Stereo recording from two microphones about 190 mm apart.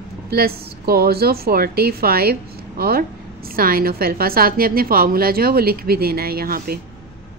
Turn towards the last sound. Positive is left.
turn(degrees=-50)  # may be behind; listen again after turning